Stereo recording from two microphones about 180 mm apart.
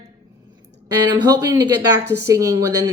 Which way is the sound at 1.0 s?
20° right (ahead or behind).